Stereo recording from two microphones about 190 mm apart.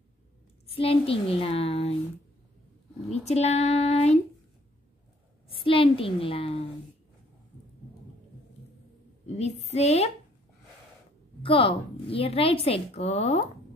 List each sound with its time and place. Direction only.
0.7 s a woman's voice: 30° left (ahead or behind)
3.1 s a woman's voice: 35° left (ahead or behind)
5.5 s a woman's voice: 30° left (ahead or behind)
9.4 s a woman's voice: 35° left (ahead or behind)
11.4 s a woman's voice: 30° left (ahead or behind)